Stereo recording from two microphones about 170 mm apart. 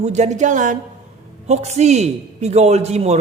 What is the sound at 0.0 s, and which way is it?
A man's voice, 40° right (ahead or behind).